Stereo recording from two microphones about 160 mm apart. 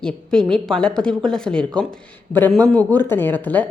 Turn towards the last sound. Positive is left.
turn(degrees=10)  # may be behind; listen again after turning